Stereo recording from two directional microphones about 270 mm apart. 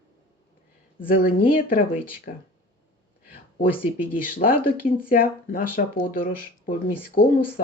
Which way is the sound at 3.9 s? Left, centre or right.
Left.